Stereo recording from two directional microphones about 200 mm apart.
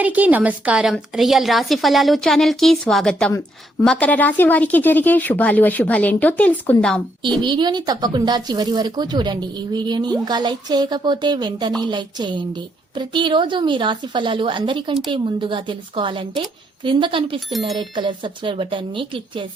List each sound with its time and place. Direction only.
0.0 s a woman's voice: 10° right (ahead or behind)
7.4 s a woman's voice: 20° right (ahead or behind)